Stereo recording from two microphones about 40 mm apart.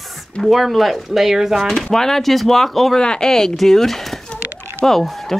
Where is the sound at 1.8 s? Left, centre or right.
Centre.